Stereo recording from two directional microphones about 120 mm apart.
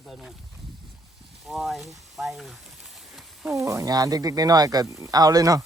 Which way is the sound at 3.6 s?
30° right (ahead or behind).